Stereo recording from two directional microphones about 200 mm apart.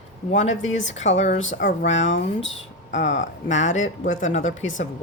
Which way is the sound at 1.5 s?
50° left (ahead or behind).